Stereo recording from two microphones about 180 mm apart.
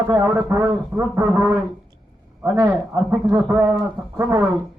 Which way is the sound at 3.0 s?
15° right (ahead or behind).